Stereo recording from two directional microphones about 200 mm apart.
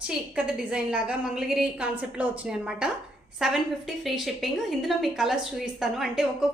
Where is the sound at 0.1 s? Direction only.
5° right (ahead or behind).